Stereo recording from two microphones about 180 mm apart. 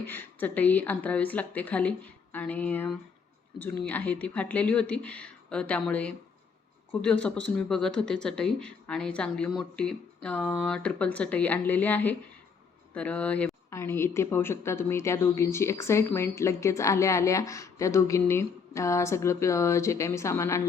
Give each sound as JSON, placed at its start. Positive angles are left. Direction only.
{"t": 0.0, "sound": "a woman's voice", "side_deg": 10}